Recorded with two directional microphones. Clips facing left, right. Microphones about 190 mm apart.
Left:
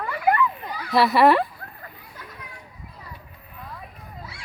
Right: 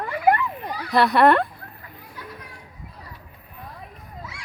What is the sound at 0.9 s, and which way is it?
Speech, centre (ahead or behind).